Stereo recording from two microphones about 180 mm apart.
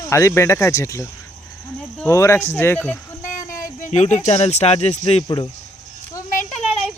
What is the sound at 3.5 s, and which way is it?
Speech, 50° left (ahead or behind).